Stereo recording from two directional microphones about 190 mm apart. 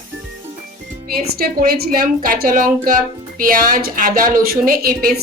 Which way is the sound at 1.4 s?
50° right (ahead or behind).